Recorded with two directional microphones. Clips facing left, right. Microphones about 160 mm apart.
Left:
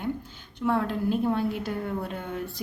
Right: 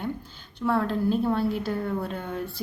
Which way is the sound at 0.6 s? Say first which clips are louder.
Right 1 dB; 15° left (ahead or behind).